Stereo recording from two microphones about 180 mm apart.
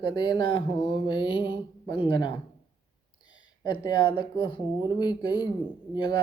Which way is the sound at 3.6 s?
25° left (ahead or behind).